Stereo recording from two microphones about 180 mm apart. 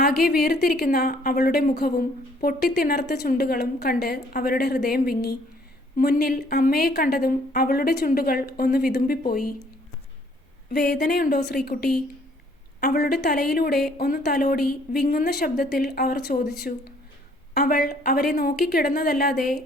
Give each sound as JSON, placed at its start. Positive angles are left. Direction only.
{"t": 0.0, "sound": "a woman's voice", "side_deg": 60}
{"t": 10.7, "sound": "speech", "side_deg": 65}
{"t": 11.0, "sound": "a woman's voice", "side_deg": 55}
{"t": 17.5, "sound": "a woman's voice", "side_deg": 60}